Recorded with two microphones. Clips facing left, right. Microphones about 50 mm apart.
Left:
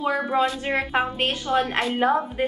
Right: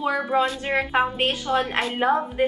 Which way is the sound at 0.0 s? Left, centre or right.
Centre.